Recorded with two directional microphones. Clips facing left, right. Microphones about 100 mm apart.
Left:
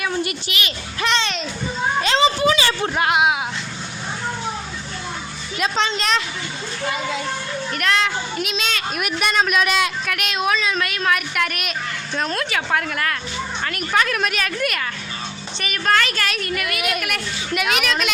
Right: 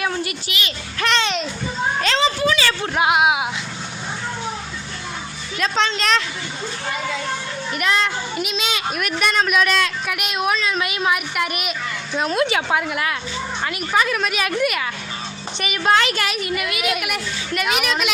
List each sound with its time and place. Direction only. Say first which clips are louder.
0.9 s a child's voice: right 1 dB; centre (ahead or behind)
1.2 s children playing: right 3 dB; 10° right (ahead or behind)
2.1 s a sound: left 3 dB; 20° left (ahead or behind)
3.0 s a sound: right 2 dB; 5° right (ahead or behind)
5.5 s a woman's voice: right 1 dB; 5° left (ahead or behind)
7.7 s a child's voice: even; 5° right (ahead or behind)
10.1 s a child's voice: even; 5° right (ahead or behind)
10.8 s a woman's voice: even; 15° right (ahead or behind)
12.4 s a woman's voice: right 5 dB; 25° right (ahead or behind)
12.7 s a woman's voice: right 1 dB; 10° right (ahead or behind)
15.5 s a woman's voice: right 2 dB; 15° right (ahead or behind)
16.3 s a woman's voice: right 1 dB; 10° right (ahead or behind)